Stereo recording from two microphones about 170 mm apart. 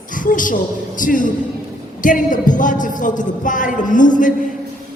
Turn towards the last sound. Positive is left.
turn(degrees=50)  # may be behind; listen again after turning